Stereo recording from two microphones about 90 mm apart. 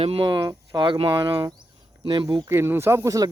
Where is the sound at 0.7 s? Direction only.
65° right (ahead or behind).